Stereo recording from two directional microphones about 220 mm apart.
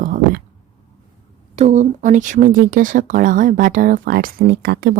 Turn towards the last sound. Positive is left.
turn(degrees=-45)  # may be behind; listen again after turning